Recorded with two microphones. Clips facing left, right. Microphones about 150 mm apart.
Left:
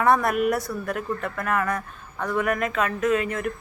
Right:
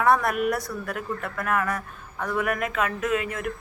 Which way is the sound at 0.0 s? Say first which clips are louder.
Left 1 dB; centre (ahead or behind).